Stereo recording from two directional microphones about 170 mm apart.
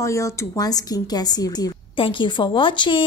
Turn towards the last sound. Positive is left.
turn(degrees=30)  # may be behind; listen again after turning